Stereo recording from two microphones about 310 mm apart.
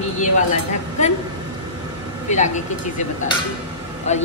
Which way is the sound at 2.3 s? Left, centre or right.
Left.